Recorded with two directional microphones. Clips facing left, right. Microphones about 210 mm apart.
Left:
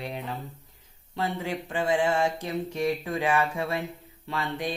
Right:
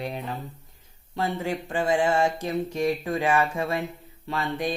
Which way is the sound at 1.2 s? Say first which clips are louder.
Right 2 dB; 45° right (ahead or behind).